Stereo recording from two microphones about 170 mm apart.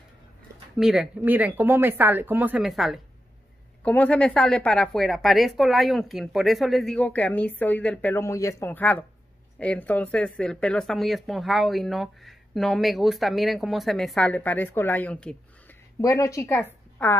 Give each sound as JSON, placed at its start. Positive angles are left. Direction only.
{"t": 0.7, "sound": "a woman's voice", "side_deg": -5}
{"t": 16.0, "sound": "a woman's voice", "side_deg": 20}